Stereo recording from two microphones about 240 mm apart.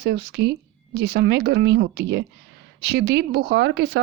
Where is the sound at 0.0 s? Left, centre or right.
Right.